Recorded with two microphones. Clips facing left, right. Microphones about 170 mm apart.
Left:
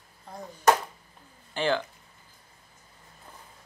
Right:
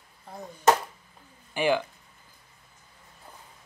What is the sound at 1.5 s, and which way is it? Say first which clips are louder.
Speech: right 2 dB; 10° right (ahead or behind).